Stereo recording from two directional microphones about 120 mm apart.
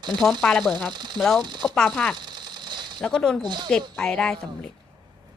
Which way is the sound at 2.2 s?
40° right (ahead or behind).